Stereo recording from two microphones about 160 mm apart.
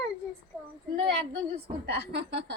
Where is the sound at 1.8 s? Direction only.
90° right.